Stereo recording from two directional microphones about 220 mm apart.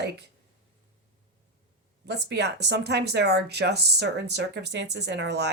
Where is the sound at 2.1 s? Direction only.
50° right (ahead or behind).